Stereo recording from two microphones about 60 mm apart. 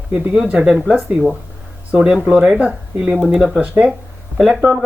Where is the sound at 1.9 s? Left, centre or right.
Centre.